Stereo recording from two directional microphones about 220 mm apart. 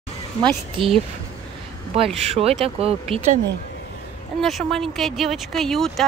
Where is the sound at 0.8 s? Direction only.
25° right (ahead or behind).